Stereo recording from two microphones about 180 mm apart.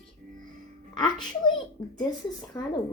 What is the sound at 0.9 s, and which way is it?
Speech, 25° left (ahead or behind).